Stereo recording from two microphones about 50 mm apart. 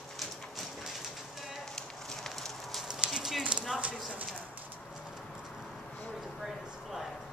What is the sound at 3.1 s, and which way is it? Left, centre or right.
Clip-clop, centre.